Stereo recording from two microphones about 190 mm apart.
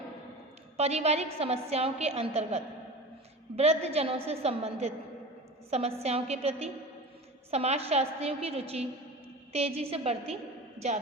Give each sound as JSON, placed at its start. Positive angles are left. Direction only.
{"t": 0.8, "sound": "a woman's voice", "side_deg": -35}